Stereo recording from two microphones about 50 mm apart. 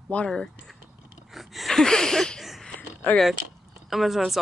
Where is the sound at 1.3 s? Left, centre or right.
Centre.